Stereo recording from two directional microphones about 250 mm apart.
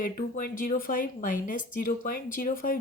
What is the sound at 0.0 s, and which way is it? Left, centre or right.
Speech, left.